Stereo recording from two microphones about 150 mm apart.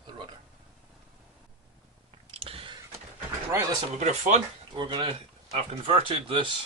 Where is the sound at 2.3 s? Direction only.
40° right (ahead or behind).